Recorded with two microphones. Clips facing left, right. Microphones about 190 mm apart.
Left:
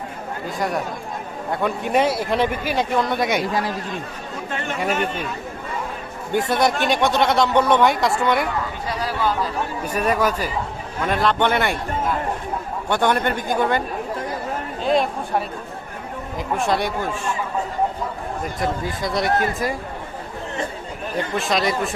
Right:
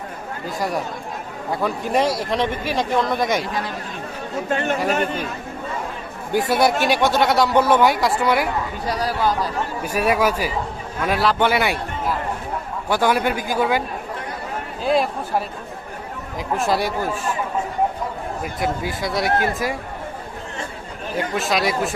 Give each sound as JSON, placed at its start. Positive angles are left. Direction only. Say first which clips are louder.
{"t": 1.6, "sound": "speech", "louder": "left 1 dB", "side_deg": 0}
{"t": 4.5, "sound": "speech", "louder": "right 3 dB", "side_deg": -40}
{"t": 6.5, "sound": "speech", "louder": "right 2 dB", "side_deg": -5}
{"t": 8.9, "sound": "speech", "louder": "right 2 dB", "side_deg": -40}
{"t": 9.4, "sound": "speech", "louder": "even", "side_deg": -10}
{"t": 14.8, "sound": "speech", "louder": "even", "side_deg": -5}
{"t": 16.5, "sound": "speech", "louder": "right 1 dB", "side_deg": 0}
{"t": 18.4, "sound": "speech", "louder": "even", "side_deg": -5}
{"t": 21.3, "sound": "speech", "louder": "even", "side_deg": 0}